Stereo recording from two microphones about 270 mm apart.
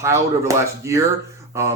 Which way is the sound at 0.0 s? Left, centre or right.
Centre.